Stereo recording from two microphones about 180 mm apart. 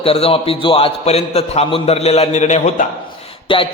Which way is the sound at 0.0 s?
30° left (ahead or behind).